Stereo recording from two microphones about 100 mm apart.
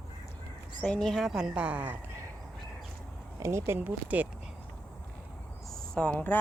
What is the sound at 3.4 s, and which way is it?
Speech, 30° right (ahead or behind).